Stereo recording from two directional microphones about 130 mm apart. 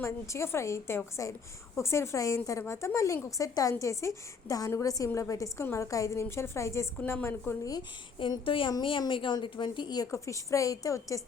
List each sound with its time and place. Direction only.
0.0 s a woman's voice: 20° left (ahead or behind)